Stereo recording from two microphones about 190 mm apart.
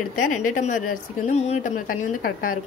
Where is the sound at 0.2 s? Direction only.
45° left (ahead or behind).